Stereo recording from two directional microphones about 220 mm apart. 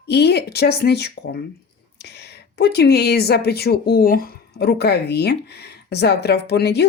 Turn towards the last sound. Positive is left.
turn(degrees=50)  # may be behind; listen again after turning